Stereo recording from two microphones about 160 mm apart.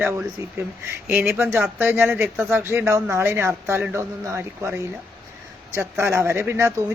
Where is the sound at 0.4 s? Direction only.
20° right (ahead or behind).